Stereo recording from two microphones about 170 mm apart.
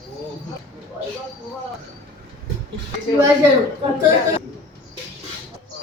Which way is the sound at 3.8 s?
30° right (ahead or behind).